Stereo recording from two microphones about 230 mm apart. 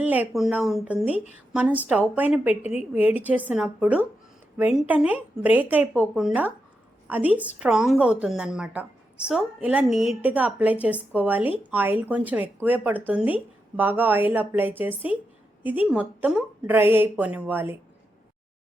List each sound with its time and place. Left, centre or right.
0.0 s a woman's voice: centre
2.6 s a woman's voice: left
2.9 s a woman's voice: centre